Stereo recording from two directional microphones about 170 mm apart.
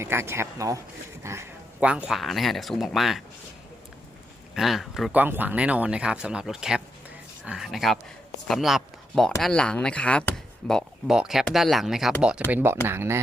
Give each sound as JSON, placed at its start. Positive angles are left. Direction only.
{"t": 0.0, "sound": "speech", "side_deg": -15}
{"t": 1.2, "sound": "a sound", "side_deg": -15}
{"t": 1.9, "sound": "speech", "side_deg": -5}
{"t": 4.5, "sound": "speech", "side_deg": 0}
{"t": 12.5, "sound": "speech", "side_deg": -10}